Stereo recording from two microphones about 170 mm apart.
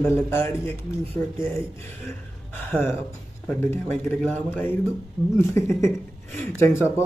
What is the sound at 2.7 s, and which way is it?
Speech, 10° left (ahead or behind).